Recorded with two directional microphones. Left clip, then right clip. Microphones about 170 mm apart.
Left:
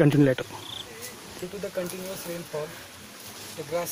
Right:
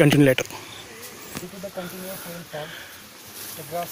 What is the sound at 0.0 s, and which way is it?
Speech, 15° right (ahead or behind).